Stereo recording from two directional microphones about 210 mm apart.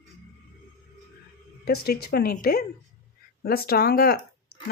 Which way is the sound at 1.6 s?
50° left (ahead or behind).